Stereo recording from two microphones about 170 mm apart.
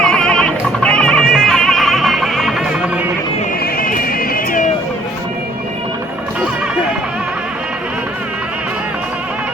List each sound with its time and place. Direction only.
0.0 s goat: 5° left (ahead or behind)
3.8 s music: 55° left (ahead or behind)